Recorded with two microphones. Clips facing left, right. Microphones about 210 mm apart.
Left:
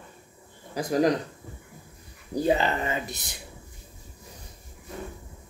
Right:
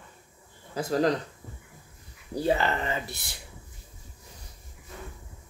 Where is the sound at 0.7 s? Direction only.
15° left (ahead or behind).